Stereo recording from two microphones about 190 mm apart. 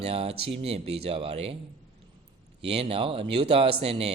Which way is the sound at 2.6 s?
30° right (ahead or behind).